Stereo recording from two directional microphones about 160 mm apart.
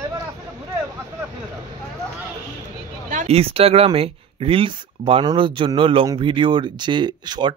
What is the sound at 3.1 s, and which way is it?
Speech, 45° right (ahead or behind).